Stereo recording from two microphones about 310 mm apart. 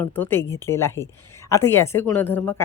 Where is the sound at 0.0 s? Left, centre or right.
Centre.